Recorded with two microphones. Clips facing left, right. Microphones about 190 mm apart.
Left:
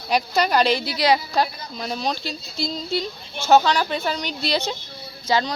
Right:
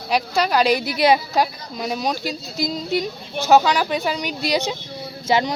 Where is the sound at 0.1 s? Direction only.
5° right (ahead or behind).